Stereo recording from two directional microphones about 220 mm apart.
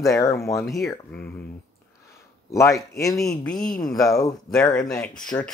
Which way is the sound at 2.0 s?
15° left (ahead or behind).